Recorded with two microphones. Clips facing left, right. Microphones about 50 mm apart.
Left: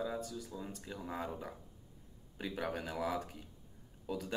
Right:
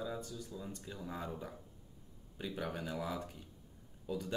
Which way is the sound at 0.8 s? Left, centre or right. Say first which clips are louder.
Left 3 dB; left.